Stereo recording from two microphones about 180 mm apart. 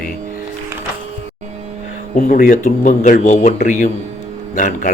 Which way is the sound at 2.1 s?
50° left (ahead or behind).